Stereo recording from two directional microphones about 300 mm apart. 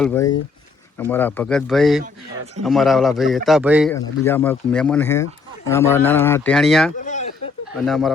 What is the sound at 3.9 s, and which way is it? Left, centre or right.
Speech, centre.